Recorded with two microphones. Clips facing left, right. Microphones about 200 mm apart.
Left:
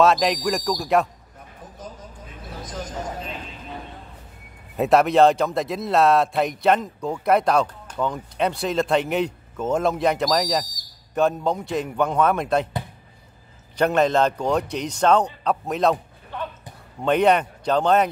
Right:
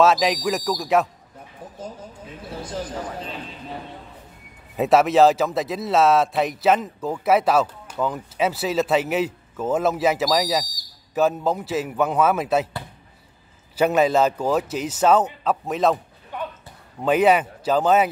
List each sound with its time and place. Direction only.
0.0 s a man's voice: centre (ahead or behind)
2.6 s speech: 30° right (ahead or behind)
4.7 s a man's voice: centre (ahead or behind)
13.7 s a man's voice: 5° right (ahead or behind)
16.3 s basketball bounce: 15° right (ahead or behind)
17.0 s a man's voice: 5° right (ahead or behind)